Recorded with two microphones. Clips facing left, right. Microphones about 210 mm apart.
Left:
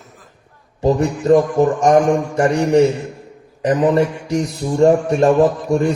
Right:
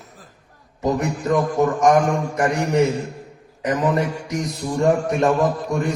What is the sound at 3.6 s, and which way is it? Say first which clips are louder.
A man's voice: left 6 dB; 30° left (ahead or behind).